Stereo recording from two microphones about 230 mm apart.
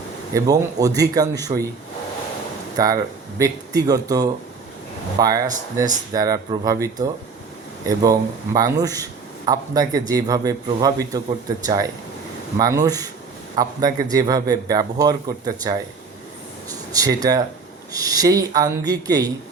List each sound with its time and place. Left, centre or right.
0.3 s a man's voice: centre
2.7 s a man's voice: centre
16.9 s a man's voice: centre